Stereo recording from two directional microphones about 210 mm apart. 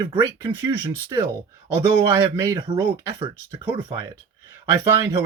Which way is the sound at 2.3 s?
15° right (ahead or behind).